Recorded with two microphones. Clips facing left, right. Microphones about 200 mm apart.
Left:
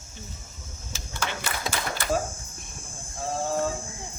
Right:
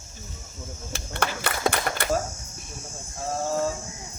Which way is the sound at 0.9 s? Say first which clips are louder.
Right 4 dB; 60° right (ahead or behind).